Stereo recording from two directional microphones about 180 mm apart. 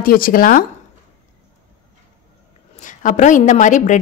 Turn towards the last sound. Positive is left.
turn(degrees=45)  # may be behind; listen again after turning